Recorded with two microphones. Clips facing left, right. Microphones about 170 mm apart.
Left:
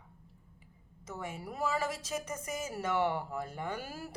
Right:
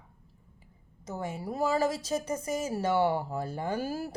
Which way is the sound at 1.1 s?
40° right (ahead or behind).